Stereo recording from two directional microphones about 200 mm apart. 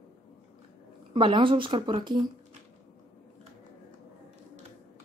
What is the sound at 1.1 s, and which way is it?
Speech, 25° right (ahead or behind).